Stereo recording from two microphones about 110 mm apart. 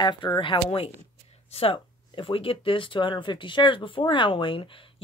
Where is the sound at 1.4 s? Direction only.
60° left (ahead or behind).